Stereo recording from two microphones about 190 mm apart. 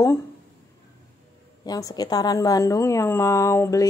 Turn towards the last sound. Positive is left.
turn(degrees=15)  # may be behind; listen again after turning